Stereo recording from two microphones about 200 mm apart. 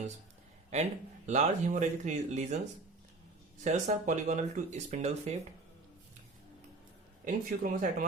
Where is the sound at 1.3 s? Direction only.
40° right (ahead or behind).